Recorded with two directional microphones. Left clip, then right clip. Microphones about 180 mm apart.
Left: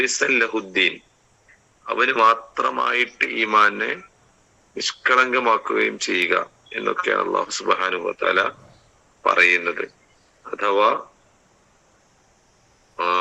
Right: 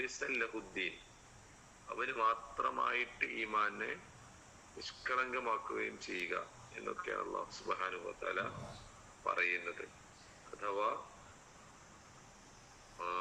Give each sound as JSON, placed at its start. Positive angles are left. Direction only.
{"t": 0.0, "sound": "speech", "side_deg": 55}